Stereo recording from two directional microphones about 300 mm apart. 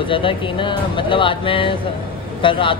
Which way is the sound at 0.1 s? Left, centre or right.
Centre.